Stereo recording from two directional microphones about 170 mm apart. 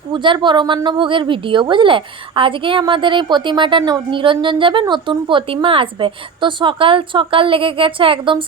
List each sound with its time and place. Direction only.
0.1 s a woman's voice: 30° right (ahead or behind)